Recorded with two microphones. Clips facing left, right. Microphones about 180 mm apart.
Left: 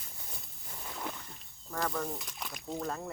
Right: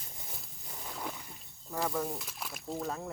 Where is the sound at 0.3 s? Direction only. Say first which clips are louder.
Even; centre (ahead or behind).